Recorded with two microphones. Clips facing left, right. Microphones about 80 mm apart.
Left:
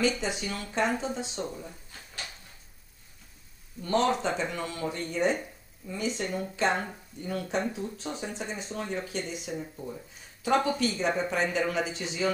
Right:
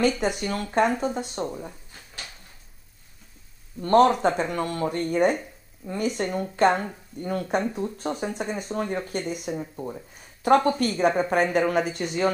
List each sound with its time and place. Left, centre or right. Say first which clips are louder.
0.2 s speech: right 7 dB; right
3.8 s speech: right 8 dB; right